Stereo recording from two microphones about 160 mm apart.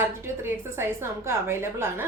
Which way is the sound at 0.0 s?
15° right (ahead or behind).